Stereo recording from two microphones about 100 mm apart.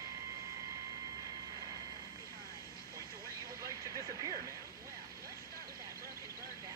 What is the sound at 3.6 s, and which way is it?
Vehicle, 40° right (ahead or behind).